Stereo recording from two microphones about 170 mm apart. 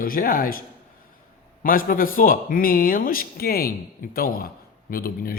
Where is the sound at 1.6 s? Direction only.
55° left (ahead or behind).